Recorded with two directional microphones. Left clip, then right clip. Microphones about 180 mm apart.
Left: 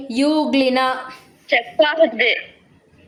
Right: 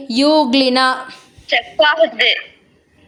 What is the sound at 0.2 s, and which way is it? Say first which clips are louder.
Speech: right 5 dB; 40° right (ahead or behind).